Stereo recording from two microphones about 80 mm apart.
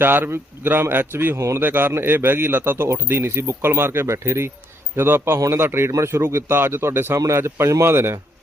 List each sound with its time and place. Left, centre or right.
0.0 s a man's voice: right